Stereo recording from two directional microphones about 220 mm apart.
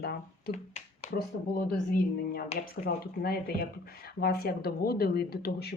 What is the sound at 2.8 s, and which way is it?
Speech, 30° left (ahead or behind).